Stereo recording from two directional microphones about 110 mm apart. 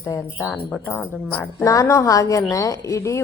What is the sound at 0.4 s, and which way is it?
A woman's voice, 15° left (ahead or behind).